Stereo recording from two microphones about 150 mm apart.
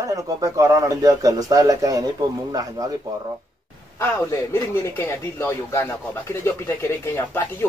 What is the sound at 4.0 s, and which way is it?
Speech, 15° left (ahead or behind).